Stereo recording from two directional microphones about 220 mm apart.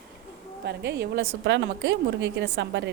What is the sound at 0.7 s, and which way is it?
A woman's voice, 50° right (ahead or behind).